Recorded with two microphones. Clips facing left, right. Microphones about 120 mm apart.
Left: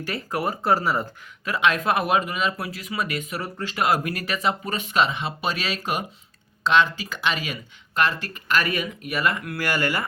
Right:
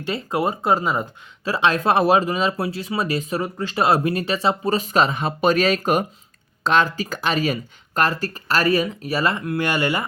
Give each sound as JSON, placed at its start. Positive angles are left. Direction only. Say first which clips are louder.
{"t": 0.0, "sound": "speech", "louder": "right 4 dB", "side_deg": -25}
{"t": 1.5, "sound": "speech", "louder": "right 3 dB", "side_deg": -30}